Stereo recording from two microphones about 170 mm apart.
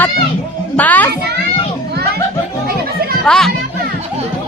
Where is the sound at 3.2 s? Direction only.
5° left (ahead or behind).